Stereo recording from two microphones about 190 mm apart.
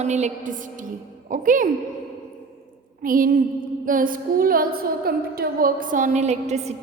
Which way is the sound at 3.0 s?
45° right (ahead or behind).